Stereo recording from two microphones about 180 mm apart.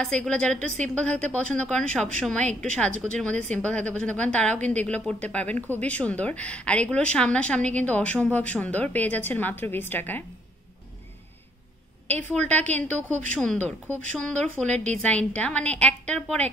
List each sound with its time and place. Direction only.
0.0 s a woman's voice: 5° left (ahead or behind)
12.1 s a woman's voice: 10° left (ahead or behind)